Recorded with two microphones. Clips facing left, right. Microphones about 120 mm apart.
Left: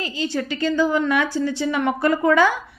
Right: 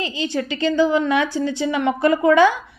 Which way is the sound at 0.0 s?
20° right (ahead or behind).